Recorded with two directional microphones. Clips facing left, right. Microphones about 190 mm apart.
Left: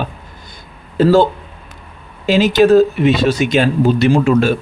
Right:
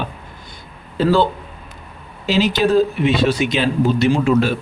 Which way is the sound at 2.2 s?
50° left (ahead or behind).